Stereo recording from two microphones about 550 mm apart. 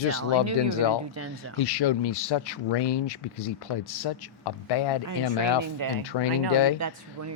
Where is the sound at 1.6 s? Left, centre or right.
Left.